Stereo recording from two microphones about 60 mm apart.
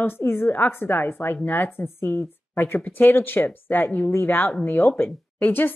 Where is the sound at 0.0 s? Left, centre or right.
Left.